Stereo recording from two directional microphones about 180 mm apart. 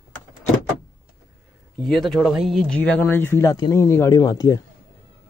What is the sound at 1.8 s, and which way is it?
Speech, centre (ahead or behind).